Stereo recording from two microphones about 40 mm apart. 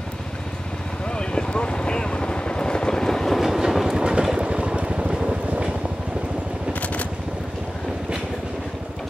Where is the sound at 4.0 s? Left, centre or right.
Centre.